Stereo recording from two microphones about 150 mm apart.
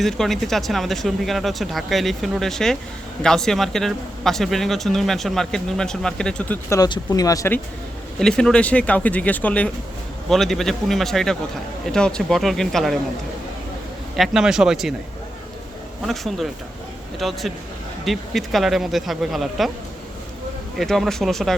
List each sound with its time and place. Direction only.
0.0 s speech: centre (ahead or behind)
6.7 s speech: 25° left (ahead or behind)
8.2 s speech: 5° left (ahead or behind)
14.2 s speech: 5° right (ahead or behind)
16.0 s speech: centre (ahead or behind)
20.7 s speech: centre (ahead or behind)